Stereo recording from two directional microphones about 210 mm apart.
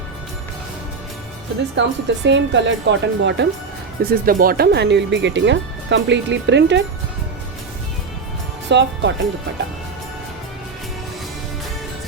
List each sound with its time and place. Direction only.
1.7 s speech: 60° right (ahead or behind)
4.0 s speech: 45° right (ahead or behind)
8.7 s speech: 55° right (ahead or behind)